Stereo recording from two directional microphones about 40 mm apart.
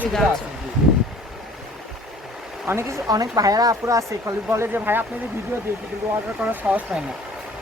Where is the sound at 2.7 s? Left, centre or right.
Right.